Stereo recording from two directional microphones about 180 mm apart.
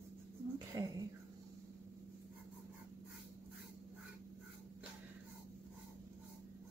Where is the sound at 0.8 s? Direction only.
20° right (ahead or behind).